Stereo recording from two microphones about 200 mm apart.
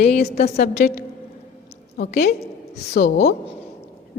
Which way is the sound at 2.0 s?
50° left (ahead or behind).